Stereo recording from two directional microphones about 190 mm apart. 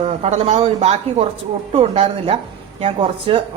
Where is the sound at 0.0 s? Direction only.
35° right (ahead or behind).